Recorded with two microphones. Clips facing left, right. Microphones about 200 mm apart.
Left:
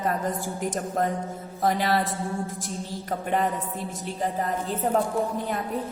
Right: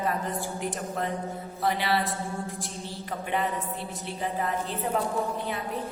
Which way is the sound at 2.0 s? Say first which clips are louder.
Left 3 dB; centre (ahead or behind).